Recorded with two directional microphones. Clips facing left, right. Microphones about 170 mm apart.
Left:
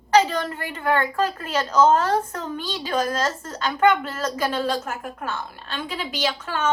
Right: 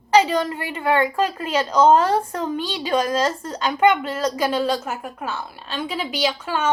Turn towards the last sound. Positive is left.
turn(degrees=-10)  # may be behind; listen again after turning